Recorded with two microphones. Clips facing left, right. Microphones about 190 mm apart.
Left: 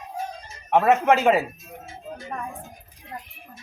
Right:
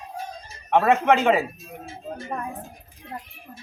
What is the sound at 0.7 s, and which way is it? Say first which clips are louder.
Speech: even; 5° left (ahead or behind).